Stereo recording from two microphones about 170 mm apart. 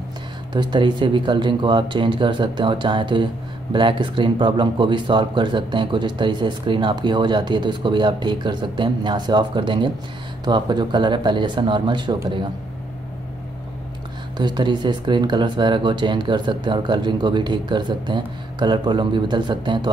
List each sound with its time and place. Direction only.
0.5 s speech: 25° right (ahead or behind)
14.3 s speech: 25° right (ahead or behind)